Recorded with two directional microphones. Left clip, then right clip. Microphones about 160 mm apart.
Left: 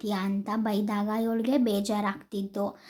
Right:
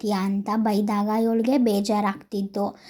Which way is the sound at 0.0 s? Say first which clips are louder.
Right 5 dB; 30° right (ahead or behind).